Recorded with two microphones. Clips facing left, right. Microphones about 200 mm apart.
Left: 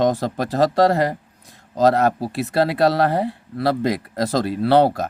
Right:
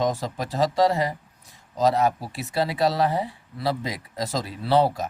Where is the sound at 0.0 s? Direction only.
65° left (ahead or behind).